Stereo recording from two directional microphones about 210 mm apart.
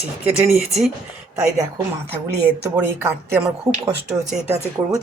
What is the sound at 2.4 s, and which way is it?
Speech, 10° right (ahead or behind).